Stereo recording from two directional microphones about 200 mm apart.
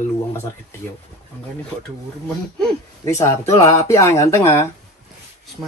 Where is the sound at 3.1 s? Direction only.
15° left (ahead or behind).